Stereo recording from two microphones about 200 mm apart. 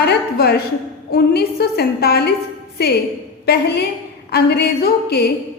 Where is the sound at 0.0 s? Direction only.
55° left (ahead or behind).